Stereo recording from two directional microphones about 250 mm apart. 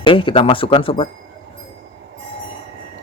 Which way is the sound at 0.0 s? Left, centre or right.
Centre.